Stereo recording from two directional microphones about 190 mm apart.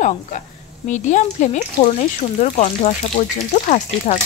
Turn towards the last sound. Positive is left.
turn(degrees=35)  # may be behind; listen again after turning